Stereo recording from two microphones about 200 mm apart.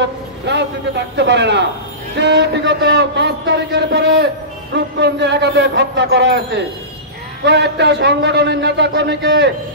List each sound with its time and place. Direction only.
0.5 s a man's voice: 60° right (ahead or behind)